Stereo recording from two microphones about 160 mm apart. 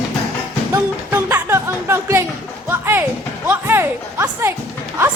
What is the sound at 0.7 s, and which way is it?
Music, 15° right (ahead or behind).